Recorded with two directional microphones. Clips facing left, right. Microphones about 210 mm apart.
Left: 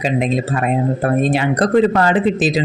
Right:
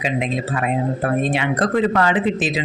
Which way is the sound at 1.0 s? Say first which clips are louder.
Left 4 dB; 40° left (ahead or behind).